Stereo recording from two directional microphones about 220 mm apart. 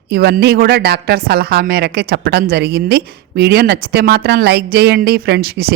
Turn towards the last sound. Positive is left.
turn(degrees=-45)  # may be behind; listen again after turning